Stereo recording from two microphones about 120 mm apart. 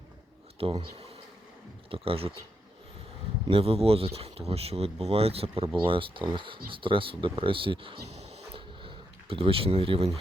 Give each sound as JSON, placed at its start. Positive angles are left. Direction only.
{"t": 0.6, "sound": "speech", "side_deg": -50}
{"t": 3.4, "sound": "speech", "side_deg": -50}
{"t": 8.0, "sound": "a sound", "side_deg": -60}